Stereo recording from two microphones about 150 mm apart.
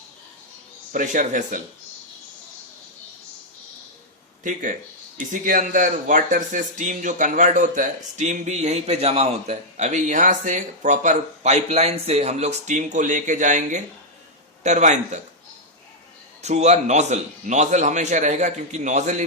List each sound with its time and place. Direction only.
0.9 s speech: 55° right (ahead or behind)
5.3 s a man's voice: 60° right (ahead or behind)
16.4 s a man's voice: 50° right (ahead or behind)